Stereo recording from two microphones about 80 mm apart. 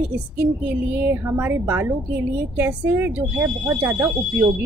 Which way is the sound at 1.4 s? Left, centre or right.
Right.